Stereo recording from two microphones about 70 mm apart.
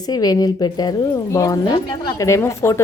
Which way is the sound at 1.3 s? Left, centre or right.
Left.